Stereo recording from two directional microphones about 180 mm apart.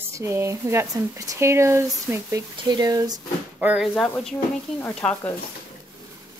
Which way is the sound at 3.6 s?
10° right (ahead or behind).